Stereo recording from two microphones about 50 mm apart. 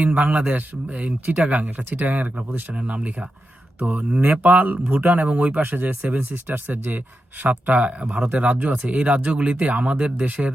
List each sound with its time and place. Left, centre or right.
0.0 s speech: right